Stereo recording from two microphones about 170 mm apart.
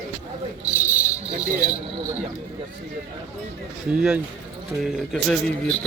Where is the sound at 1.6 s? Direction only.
10° right (ahead or behind).